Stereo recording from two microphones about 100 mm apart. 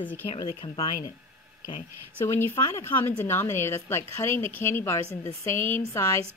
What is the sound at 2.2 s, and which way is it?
A woman's voice, 25° left (ahead or behind).